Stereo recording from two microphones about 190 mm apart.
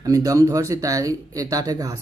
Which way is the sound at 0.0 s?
20° right (ahead or behind).